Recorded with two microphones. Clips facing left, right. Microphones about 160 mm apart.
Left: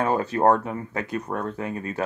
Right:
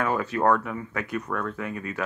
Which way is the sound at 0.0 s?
30° left (ahead or behind).